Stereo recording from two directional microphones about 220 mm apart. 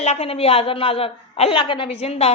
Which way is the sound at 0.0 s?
30° left (ahead or behind).